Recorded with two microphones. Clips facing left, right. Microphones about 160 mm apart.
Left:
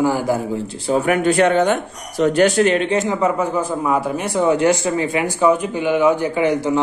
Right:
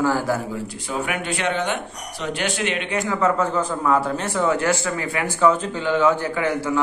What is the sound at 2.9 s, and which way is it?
A man's voice, 20° left (ahead or behind).